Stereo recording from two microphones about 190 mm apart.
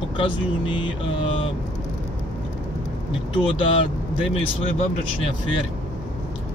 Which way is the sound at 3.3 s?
25° left (ahead or behind).